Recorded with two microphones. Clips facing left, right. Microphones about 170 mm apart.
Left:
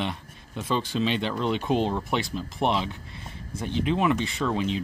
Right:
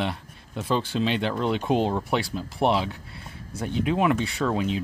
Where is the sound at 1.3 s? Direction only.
10° right (ahead or behind).